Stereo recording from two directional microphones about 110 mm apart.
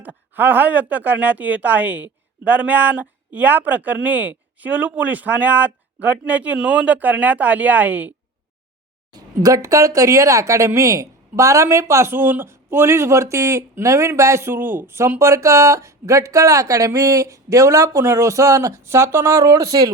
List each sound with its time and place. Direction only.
0.3 s speech: 15° right (ahead or behind)
9.1 s speech: 30° right (ahead or behind)